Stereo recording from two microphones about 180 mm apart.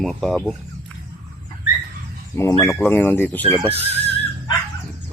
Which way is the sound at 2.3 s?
20° left (ahead or behind).